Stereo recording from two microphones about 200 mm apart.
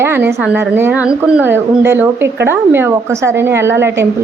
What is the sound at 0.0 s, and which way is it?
A woman's voice, 10° right (ahead or behind).